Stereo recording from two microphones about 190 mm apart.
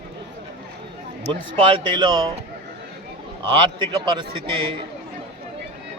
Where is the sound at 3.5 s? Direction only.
25° right (ahead or behind).